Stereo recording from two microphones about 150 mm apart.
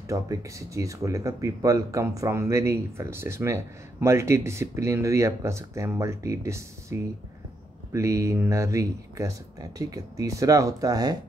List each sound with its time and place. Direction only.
0.1 s speech: 20° right (ahead or behind)